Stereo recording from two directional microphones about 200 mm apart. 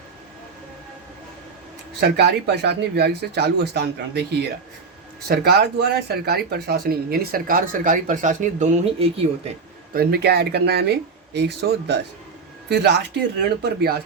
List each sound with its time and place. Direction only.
2.0 s speech: 55° right (ahead or behind); by 9.5 s 30° right (ahead or behind)
9.9 s a man's voice: 50° right (ahead or behind)